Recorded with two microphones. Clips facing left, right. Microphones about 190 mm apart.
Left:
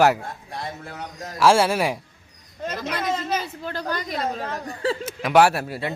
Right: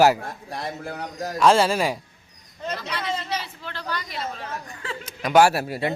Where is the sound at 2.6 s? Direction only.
50° left (ahead or behind).